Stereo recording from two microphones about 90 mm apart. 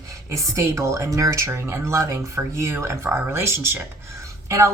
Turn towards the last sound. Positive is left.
turn(degrees=-35)  # may be behind; listen again after turning